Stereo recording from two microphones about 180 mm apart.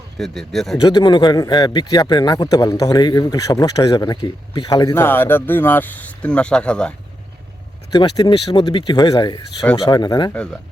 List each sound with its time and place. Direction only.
0.2 s speech: centre (ahead or behind)
0.8 s a man's voice: 25° left (ahead or behind); by 6.9 s 5° left (ahead or behind)
7.9 s a man's voice: 25° left (ahead or behind)
10.3 s speech: 5° left (ahead or behind)